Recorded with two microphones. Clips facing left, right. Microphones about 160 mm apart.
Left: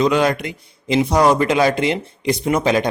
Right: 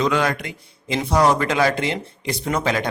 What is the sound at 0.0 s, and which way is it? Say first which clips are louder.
A man's voice: left 4 dB; 20° left (ahead or behind).